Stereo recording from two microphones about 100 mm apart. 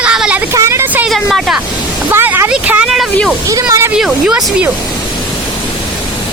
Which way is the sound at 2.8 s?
5° right (ahead or behind).